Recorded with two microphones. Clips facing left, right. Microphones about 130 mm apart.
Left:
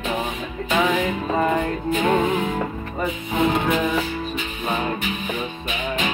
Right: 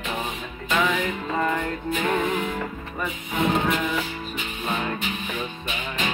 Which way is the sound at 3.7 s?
15° left (ahead or behind).